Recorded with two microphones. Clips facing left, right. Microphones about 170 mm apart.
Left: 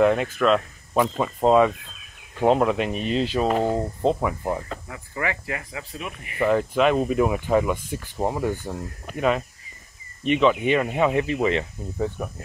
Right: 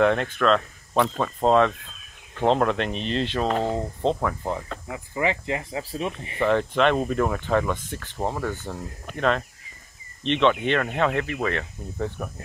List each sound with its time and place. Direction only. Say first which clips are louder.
0.0 s speech: left 1 dB; 5° left (ahead or behind)
4.8 s speech: right 6 dB; 20° right (ahead or behind)
6.4 s speech: left 1 dB; 5° left (ahead or behind)